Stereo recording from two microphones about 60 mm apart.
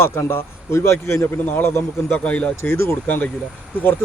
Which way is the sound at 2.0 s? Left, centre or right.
Left.